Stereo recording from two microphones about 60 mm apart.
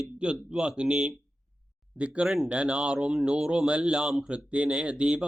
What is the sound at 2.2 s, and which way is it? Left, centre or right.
Speech, centre.